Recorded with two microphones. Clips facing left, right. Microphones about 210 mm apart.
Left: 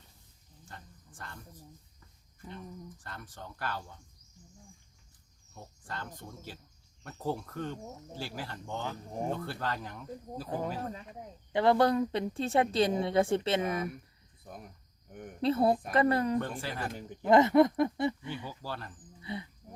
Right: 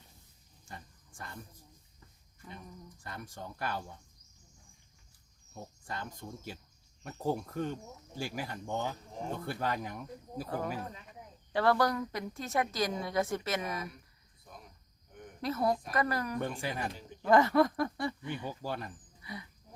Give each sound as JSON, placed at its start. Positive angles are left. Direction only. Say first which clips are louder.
{"t": 0.7, "sound": "speech", "louder": "right 2 dB", "side_deg": -10}
{"t": 3.0, "sound": "speech", "louder": "right 2 dB", "side_deg": -10}
{"t": 5.5, "sound": "speech", "louder": "right 1 dB", "side_deg": -15}
{"t": 11.5, "sound": "a woman's voice", "louder": "left 3 dB", "side_deg": 20}
{"t": 14.4, "sound": "cricket", "louder": "left 6 dB", "side_deg": 55}
{"t": 15.4, "sound": "a woman's voice", "louder": "left 5 dB", "side_deg": 30}
{"t": 16.4, "sound": "speech", "louder": "even", "side_deg": -15}
{"t": 17.2, "sound": "a woman's voice", "louder": "left 3 dB", "side_deg": 20}
{"t": 18.4, "sound": "speech", "louder": "right 3 dB", "side_deg": -15}
{"t": 19.2, "sound": "speech", "louder": "left 6 dB", "side_deg": 25}